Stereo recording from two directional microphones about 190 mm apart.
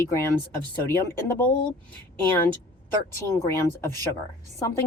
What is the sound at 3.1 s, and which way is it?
Speech, 15° left (ahead or behind).